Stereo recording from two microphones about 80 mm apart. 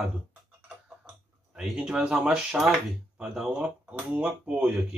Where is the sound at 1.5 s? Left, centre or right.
Centre.